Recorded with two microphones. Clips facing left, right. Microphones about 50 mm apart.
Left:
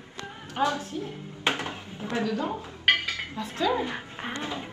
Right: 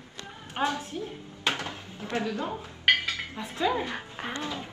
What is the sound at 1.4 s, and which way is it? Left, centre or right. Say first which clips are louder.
Dishes: left 2 dB; left.